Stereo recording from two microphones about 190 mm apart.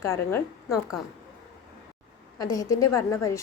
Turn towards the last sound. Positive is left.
turn(degrees=15)  # may be behind; listen again after turning